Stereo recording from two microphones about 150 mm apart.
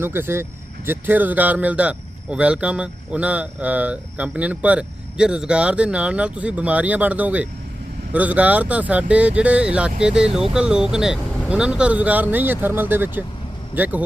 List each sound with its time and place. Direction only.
0.0 s speech: 15° right (ahead or behind)